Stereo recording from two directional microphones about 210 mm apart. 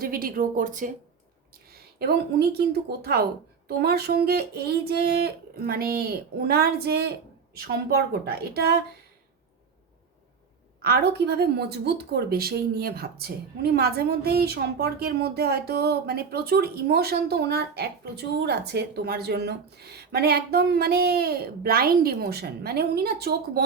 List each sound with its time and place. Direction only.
0.0 s a woman's voice: 45° right (ahead or behind)
10.8 s a woman's voice: 50° right (ahead or behind)